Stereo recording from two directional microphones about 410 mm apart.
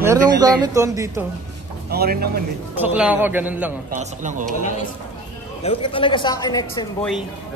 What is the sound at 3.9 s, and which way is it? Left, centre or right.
Speech, centre.